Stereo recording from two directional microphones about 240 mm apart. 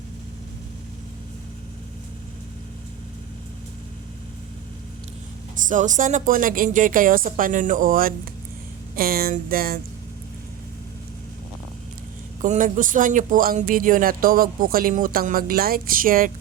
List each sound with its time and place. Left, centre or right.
5.6 s speech: right
12.4 s speech: right